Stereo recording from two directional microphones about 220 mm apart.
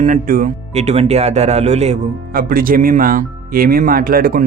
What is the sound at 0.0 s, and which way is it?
Speech, 40° right (ahead or behind).